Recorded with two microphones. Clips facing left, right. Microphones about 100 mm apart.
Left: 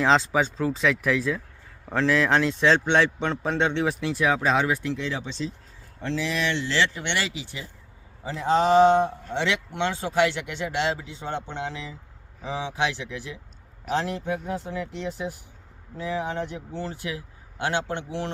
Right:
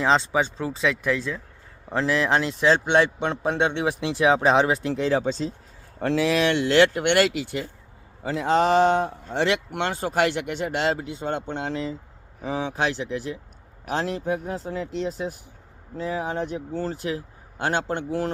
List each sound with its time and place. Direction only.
0.0 s a man's voice: centre (ahead or behind); by 5.5 s 40° right (ahead or behind)
6.0 s speech: 60° right (ahead or behind); by 14.8 s 40° right (ahead or behind)
16.0 s speech: 40° right (ahead or behind)